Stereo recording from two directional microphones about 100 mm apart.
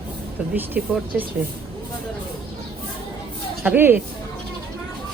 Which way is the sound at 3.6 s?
20° right (ahead or behind).